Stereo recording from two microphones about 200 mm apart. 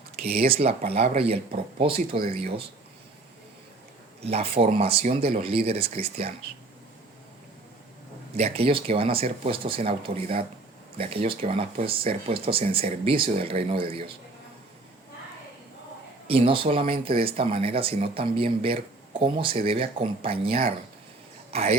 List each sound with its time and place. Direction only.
0.3 s speech: 30° right (ahead or behind)
4.2 s speech: 30° right (ahead or behind)
8.4 s speech: 30° right (ahead or behind)
16.2 s speech: 30° right (ahead or behind)